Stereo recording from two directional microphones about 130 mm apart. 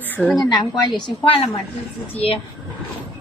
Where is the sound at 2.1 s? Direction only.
50° left (ahead or behind).